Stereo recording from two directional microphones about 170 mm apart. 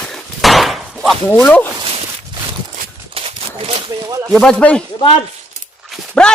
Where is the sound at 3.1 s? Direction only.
35° right (ahead or behind).